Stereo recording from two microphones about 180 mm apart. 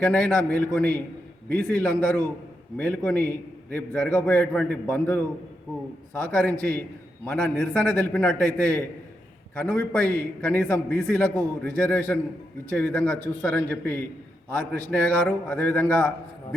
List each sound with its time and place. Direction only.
0.0 s a man's voice: 5° left (ahead or behind)
1.9 s a man's voice: 20° right (ahead or behind)
2.7 s a man's voice: 10° left (ahead or behind)
6.3 s a man's voice: 10° left (ahead or behind)